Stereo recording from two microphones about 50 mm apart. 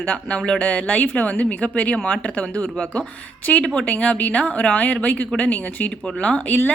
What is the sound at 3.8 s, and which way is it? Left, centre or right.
Speech, left.